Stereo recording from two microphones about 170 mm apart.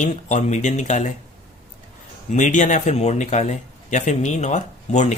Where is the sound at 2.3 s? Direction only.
45° left (ahead or behind).